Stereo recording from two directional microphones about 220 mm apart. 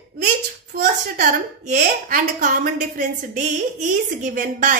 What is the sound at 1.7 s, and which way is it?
A woman's voice, 40° right (ahead or behind).